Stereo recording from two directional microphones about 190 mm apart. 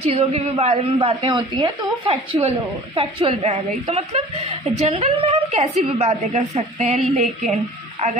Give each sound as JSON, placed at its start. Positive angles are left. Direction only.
{"t": 0.0, "sound": "a woman's voice", "side_deg": -35}